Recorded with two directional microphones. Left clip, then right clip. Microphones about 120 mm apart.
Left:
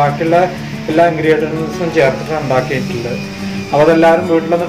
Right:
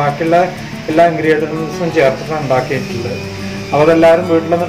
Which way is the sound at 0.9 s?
15° right (ahead or behind).